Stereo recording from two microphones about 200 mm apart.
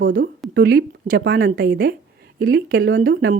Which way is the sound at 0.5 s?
50° right (ahead or behind).